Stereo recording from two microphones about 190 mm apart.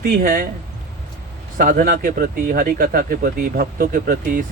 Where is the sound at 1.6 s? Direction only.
45° right (ahead or behind).